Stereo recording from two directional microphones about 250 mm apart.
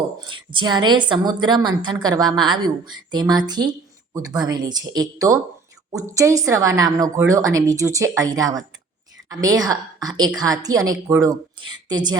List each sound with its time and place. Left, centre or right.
0.3 s a woman's voice: centre